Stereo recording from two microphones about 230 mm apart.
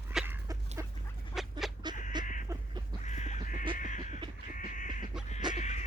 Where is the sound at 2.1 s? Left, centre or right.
Centre.